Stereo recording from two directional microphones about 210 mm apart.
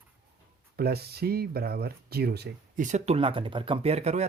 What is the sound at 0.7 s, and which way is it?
Speech, 50° right (ahead or behind).